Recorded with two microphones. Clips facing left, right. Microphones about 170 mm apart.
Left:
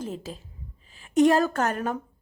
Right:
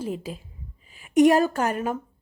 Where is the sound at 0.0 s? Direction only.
10° right (ahead or behind).